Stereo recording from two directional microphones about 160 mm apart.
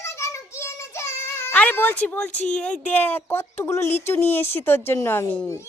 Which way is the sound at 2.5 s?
5° left (ahead or behind).